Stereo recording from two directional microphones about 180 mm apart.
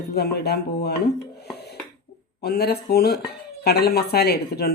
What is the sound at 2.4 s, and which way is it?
Speech, 60° left (ahead or behind).